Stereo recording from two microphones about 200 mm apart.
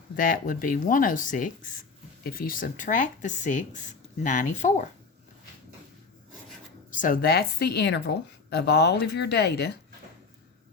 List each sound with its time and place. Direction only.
0.2 s speech: 40° left (ahead or behind)
6.9 s speech: 40° left (ahead or behind)